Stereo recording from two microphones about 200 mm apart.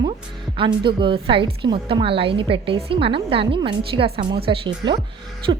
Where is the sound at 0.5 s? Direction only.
25° right (ahead or behind).